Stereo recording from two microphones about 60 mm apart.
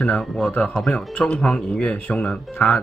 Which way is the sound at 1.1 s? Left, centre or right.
Centre.